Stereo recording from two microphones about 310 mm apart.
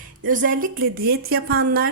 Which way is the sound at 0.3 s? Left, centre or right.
Right.